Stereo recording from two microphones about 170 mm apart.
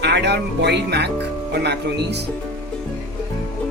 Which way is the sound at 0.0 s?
80° right.